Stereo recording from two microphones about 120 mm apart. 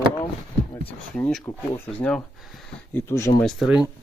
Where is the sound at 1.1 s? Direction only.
10° left (ahead or behind).